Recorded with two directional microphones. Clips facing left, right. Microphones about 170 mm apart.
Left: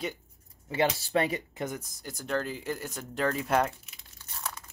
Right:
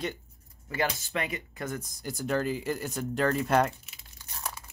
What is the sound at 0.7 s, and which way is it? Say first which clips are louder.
Speech: left 4 dB; 30° left (ahead or behind).